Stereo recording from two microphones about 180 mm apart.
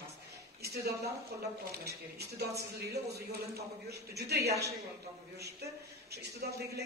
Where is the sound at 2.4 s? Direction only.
65° right (ahead or behind).